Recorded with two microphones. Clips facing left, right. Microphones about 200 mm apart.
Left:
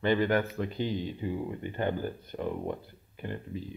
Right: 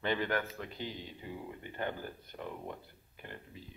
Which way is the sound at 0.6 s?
30° left (ahead or behind).